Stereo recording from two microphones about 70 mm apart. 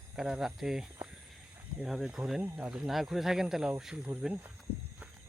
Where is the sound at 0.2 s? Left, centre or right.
Centre.